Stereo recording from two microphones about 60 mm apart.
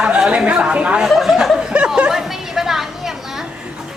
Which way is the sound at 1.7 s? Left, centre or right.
Centre.